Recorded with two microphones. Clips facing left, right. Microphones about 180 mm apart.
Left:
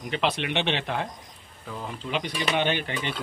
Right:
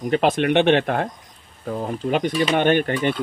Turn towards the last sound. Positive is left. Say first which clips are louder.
# right 9 dB
turn(degrees=-50)  # may be behind; listen again after turning